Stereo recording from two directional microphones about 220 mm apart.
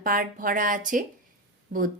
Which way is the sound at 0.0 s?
40° right (ahead or behind).